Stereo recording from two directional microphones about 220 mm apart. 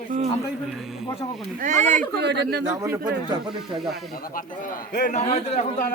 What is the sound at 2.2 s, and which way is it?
Speech, 50° right (ahead or behind).